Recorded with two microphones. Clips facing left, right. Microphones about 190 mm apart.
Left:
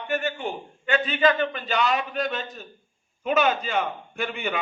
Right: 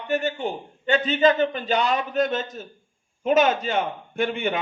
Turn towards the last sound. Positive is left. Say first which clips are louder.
# right 5 dB
turn(degrees=-40)  # may be behind; listen again after turning